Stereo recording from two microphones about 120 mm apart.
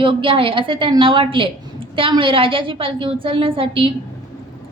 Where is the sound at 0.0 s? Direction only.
45° right (ahead or behind).